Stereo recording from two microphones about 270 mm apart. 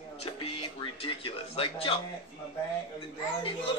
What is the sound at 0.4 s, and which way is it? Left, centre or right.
Speech, left.